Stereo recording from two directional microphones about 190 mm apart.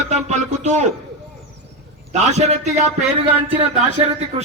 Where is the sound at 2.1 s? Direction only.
35° right (ahead or behind).